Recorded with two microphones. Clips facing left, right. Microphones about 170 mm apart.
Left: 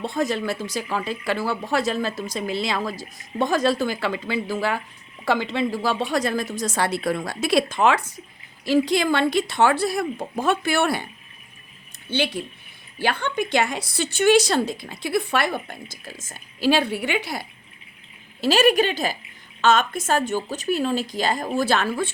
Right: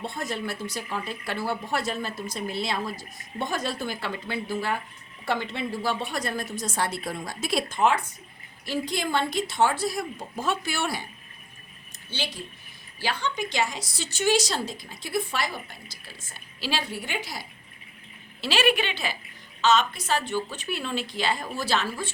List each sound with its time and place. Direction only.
0.0 s speech: 90° left; by 11.0 s 60° left (ahead or behind)
12.1 s speech: 60° left (ahead or behind)
18.3 s a woman's voice: 45° left (ahead or behind)